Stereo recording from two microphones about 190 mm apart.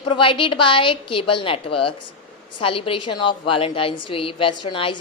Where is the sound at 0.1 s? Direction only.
25° left (ahead or behind).